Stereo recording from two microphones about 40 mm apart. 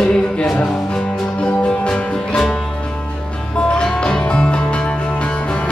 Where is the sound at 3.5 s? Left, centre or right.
Left.